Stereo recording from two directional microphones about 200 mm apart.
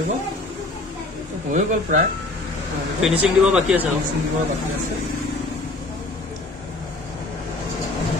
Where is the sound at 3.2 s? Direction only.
5° right (ahead or behind).